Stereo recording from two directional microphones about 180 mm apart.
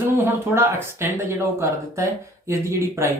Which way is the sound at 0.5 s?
15° right (ahead or behind).